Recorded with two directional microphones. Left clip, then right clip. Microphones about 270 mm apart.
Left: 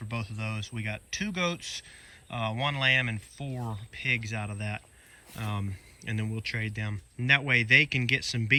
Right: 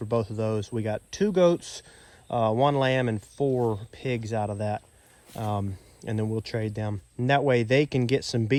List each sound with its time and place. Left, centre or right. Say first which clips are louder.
0.1 s speech: right 10 dB; centre